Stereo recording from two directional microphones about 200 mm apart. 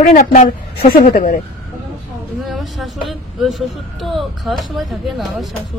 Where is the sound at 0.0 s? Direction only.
40° left (ahead or behind).